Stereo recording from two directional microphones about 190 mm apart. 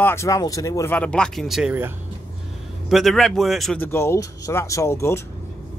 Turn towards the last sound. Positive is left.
turn(degrees=15)  # may be behind; listen again after turning